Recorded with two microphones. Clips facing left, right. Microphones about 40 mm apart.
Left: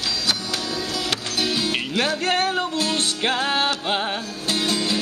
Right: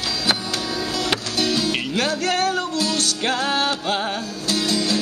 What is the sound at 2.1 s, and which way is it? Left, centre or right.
Music, left.